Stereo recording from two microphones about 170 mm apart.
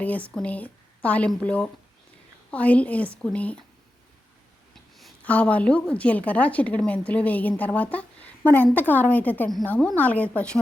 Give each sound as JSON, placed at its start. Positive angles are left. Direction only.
{"t": 0.0, "sound": "a woman's voice", "side_deg": 10}
{"t": 4.7, "sound": "a woman's voice", "side_deg": 0}